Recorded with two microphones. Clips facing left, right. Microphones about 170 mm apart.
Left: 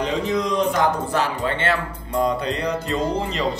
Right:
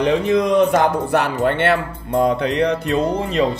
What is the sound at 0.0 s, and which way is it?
A man's voice, 60° right (ahead or behind).